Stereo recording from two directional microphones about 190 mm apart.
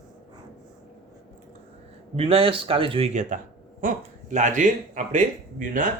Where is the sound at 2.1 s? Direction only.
30° right (ahead or behind).